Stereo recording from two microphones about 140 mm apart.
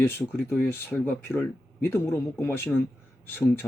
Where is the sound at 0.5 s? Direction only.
15° left (ahead or behind).